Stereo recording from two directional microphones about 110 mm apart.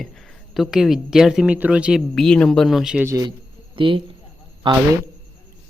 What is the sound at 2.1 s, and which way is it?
Speech, 5° left (ahead or behind).